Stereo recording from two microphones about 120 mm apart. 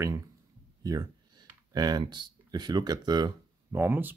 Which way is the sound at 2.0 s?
40° right (ahead or behind).